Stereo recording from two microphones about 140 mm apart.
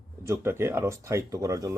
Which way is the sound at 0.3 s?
20° right (ahead or behind).